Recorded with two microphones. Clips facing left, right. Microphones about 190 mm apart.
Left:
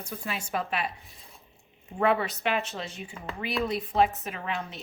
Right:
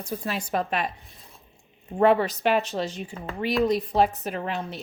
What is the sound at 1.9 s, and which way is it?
Speech, 35° right (ahead or behind).